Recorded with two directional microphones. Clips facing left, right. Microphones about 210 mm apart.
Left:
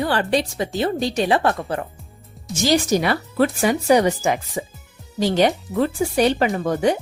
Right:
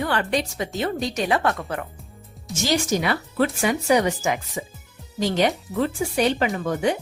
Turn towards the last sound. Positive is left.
turn(degrees=35)  # may be behind; listen again after turning